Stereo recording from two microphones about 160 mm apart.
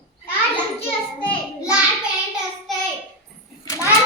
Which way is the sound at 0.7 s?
30° left (ahead or behind).